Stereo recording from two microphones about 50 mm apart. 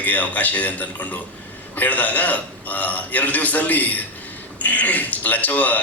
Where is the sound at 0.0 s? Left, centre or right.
Left.